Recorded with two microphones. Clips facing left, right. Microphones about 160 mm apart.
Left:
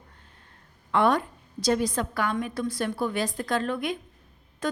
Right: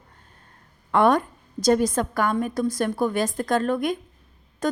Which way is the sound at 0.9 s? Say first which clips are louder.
Right 4 dB; 45° right (ahead or behind).